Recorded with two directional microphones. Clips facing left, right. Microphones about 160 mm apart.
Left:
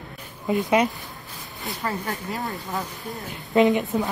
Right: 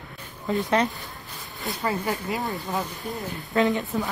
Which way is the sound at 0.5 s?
10° left (ahead or behind).